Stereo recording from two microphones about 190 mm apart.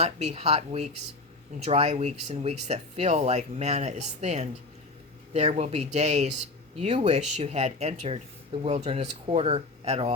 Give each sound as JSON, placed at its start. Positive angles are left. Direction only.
{"t": 0.0, "sound": "speech", "side_deg": -35}